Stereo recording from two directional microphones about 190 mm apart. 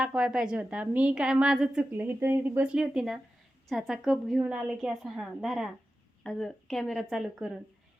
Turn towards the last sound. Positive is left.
turn(degrees=0)  # may be behind; listen again after turning